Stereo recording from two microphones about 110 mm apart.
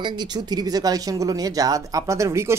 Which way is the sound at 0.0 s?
40° right (ahead or behind).